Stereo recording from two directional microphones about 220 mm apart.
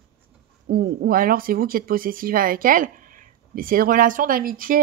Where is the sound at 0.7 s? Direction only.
45° right (ahead or behind).